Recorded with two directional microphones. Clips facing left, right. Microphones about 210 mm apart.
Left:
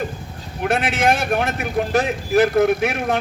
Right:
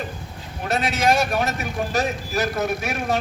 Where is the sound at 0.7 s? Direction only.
55° left (ahead or behind).